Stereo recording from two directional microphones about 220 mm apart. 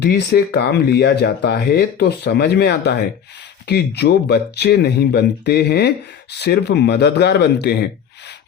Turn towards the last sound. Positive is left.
turn(degrees=50)  # may be behind; listen again after turning